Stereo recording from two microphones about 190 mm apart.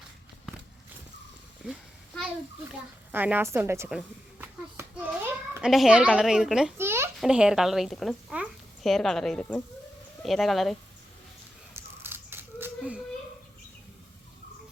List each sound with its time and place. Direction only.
3.1 s a woman's voice: 10° right (ahead or behind)
6.7 s a sound: 15° right (ahead or behind)
7.2 s a woman's voice: 5° right (ahead or behind)
11.7 s scissors: 10° right (ahead or behind)